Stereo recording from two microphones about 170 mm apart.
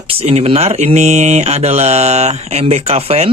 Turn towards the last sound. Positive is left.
turn(degrees=-35)  # may be behind; listen again after turning